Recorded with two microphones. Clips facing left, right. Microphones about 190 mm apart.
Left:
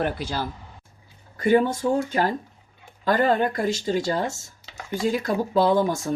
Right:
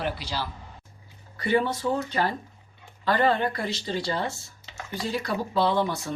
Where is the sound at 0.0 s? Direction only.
50° left (ahead or behind).